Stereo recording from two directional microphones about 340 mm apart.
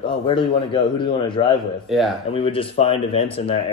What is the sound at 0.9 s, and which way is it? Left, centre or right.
Speech, centre.